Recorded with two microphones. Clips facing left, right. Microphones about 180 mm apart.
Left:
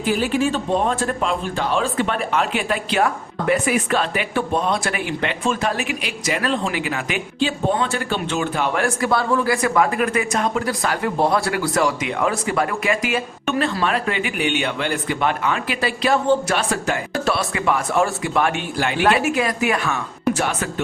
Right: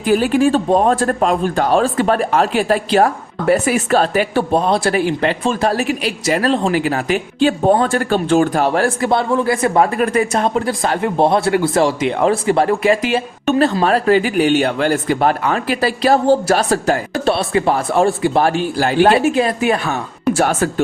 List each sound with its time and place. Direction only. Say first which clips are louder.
0.1 s speech: right 7 dB; 50° right (ahead or behind)
20.4 s speech: right 7 dB; 45° right (ahead or behind)